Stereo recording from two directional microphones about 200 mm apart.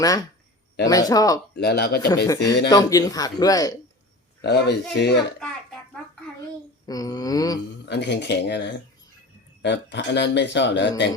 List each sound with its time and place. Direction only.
0.0 s speech: 20° left (ahead or behind)
1.5 s speech: 55° left (ahead or behind)
2.2 s speech: 20° left (ahead or behind)
4.4 s speech: 55° left (ahead or behind)
6.8 s a sound: 20° left (ahead or behind)
7.9 s speech: 60° left (ahead or behind)